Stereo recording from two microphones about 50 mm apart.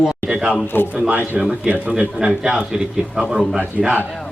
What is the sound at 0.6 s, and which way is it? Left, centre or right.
Speech, left.